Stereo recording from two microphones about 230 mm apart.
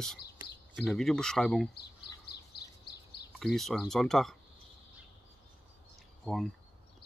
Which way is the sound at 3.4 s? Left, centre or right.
Centre.